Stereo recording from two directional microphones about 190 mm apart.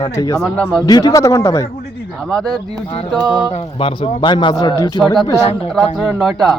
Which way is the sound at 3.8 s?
30° left (ahead or behind).